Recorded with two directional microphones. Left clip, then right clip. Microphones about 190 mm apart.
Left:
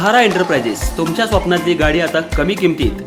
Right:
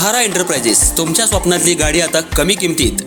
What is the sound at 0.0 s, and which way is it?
Speech, 35° right (ahead or behind).